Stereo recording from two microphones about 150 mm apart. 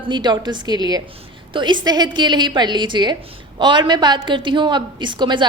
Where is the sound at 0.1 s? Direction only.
30° right (ahead or behind).